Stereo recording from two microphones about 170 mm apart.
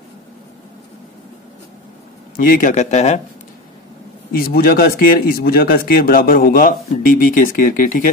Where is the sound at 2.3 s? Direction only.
55° left (ahead or behind).